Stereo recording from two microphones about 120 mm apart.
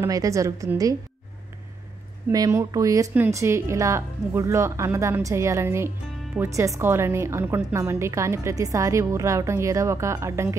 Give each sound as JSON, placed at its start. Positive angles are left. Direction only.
{"t": 0.0, "sound": "speech", "side_deg": -25}
{"t": 2.3, "sound": "speech", "side_deg": -30}